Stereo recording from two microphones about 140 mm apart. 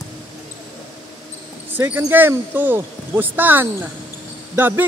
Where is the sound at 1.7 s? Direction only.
10° right (ahead or behind).